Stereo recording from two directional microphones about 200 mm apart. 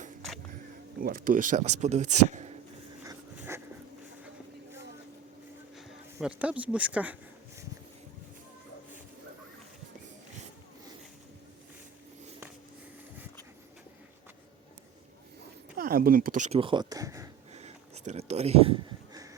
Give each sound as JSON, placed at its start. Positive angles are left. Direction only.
{"t": 1.0, "sound": "speech", "side_deg": -45}
{"t": 3.0, "sound": "a sound", "side_deg": -10}
{"t": 5.7, "sound": "speech", "side_deg": 0}
{"t": 15.8, "sound": "speech", "side_deg": -45}
{"t": 16.6, "sound": "speech", "side_deg": -25}
{"t": 17.5, "sound": "a sound", "side_deg": -35}